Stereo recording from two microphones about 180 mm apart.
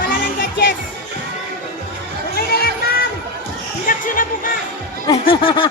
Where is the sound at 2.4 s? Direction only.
60° left (ahead or behind).